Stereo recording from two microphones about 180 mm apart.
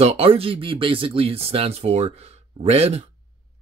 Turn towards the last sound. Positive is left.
turn(degrees=-35)  # may be behind; listen again after turning